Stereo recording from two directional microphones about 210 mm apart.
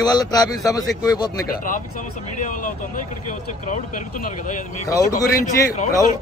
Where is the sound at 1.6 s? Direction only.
40° left (ahead or behind).